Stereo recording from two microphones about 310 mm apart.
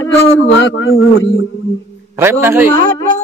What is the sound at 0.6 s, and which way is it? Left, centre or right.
Speech, left.